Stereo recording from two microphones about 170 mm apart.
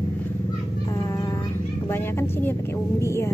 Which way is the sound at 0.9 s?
20° left (ahead or behind).